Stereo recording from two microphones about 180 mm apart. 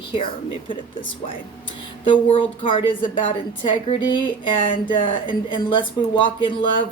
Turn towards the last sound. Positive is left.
turn(degrees=25)  # may be behind; listen again after turning